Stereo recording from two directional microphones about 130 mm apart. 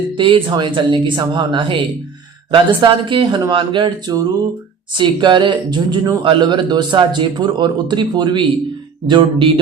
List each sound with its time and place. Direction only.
0.2 s speech: 40° right (ahead or behind)